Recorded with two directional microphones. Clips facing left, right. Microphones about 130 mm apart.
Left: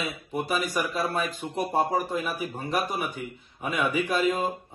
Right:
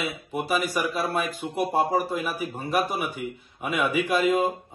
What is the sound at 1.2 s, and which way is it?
Speech, 55° right (ahead or behind).